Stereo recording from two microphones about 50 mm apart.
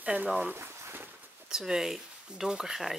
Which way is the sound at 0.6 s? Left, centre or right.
Right.